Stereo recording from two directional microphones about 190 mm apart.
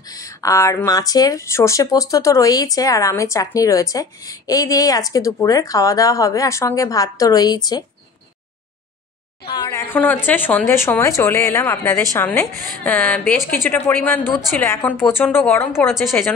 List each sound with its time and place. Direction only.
0.0 s speech: 20° left (ahead or behind)
9.7 s a woman's voice: 10° left (ahead or behind)